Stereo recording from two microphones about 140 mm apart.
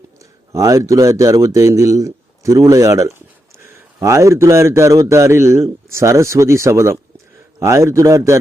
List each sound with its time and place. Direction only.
0.2 s speech: 25° right (ahead or behind)